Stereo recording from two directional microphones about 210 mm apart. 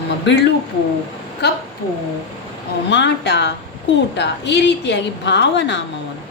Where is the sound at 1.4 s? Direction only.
50° left (ahead or behind).